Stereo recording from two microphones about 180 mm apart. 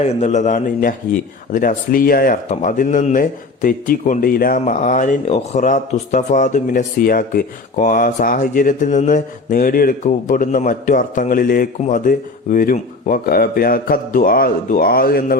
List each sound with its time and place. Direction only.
0.0 s a man's voice: 40° left (ahead or behind); by 15.4 s 55° left (ahead or behind)